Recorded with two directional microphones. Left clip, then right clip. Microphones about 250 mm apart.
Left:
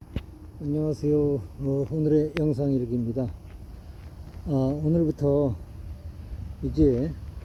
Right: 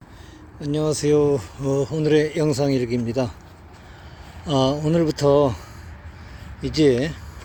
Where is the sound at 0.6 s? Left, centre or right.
Centre.